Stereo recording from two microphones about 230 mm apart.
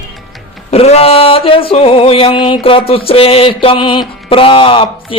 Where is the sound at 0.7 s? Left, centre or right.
Left.